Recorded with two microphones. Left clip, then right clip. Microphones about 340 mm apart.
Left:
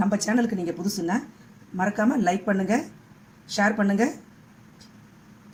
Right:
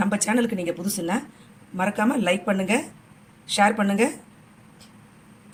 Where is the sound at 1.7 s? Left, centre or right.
Centre.